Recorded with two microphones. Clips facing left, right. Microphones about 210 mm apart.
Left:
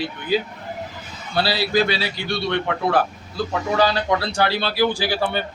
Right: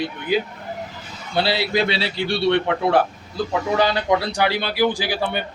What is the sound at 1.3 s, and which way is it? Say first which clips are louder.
A man's voice: even; 20° right (ahead or behind).